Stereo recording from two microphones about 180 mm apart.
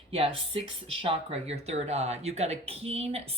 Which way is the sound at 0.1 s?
30° right (ahead or behind).